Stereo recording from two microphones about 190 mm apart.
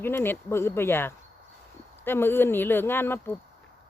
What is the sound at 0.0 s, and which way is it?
Speech, 10° left (ahead or behind).